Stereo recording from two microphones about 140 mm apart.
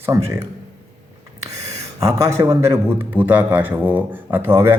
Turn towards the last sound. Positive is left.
turn(degrees=-15)  # may be behind; listen again after turning